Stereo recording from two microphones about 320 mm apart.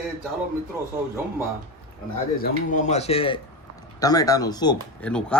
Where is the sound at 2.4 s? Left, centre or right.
Left.